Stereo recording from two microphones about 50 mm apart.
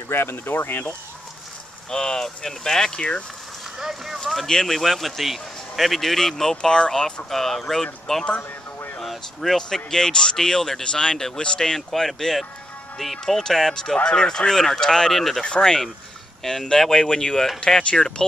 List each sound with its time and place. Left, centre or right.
0.1 s speech: left
1.9 s speech: centre
3.7 s speech: centre
4.5 s speech: centre
7.2 s speech: centre
9.0 s speech: centre